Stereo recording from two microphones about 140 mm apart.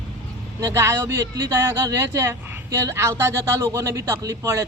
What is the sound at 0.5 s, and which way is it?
Speech, 20° right (ahead or behind).